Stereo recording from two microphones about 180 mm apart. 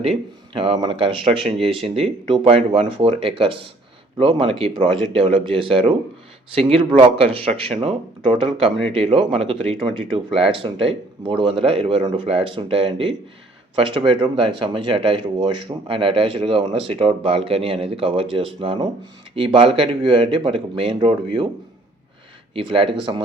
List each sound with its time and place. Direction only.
0.0 s speech: 30° right (ahead or behind)
1.4 s speech: centre (ahead or behind)
1.6 s speech: 35° right (ahead or behind)
22.5 s speech: 30° right (ahead or behind)